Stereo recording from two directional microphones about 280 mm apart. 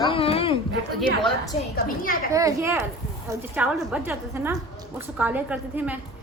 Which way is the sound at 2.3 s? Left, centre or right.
Centre.